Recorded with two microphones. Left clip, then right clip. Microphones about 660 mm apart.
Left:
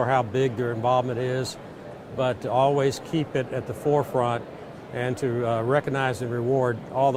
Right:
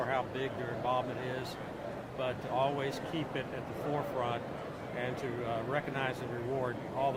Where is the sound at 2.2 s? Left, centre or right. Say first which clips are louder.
Left 11 dB; left.